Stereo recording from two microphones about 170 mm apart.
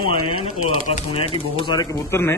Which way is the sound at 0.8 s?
40° left (ahead or behind).